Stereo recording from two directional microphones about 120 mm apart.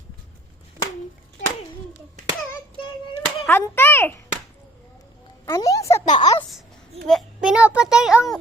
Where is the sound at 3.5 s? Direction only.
20° left (ahead or behind).